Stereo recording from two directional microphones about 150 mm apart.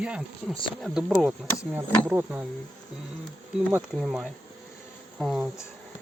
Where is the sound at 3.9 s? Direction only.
5° right (ahead or behind).